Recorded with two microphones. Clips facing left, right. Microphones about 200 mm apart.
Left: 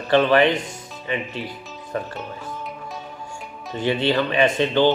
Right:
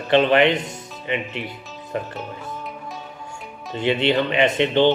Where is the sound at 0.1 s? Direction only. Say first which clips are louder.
Even; 20° right (ahead or behind).